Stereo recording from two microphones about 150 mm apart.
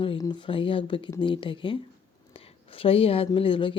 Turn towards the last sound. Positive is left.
turn(degrees=35)  # may be behind; listen again after turning